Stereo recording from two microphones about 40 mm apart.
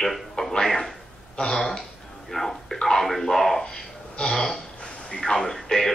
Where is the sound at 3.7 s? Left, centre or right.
Centre.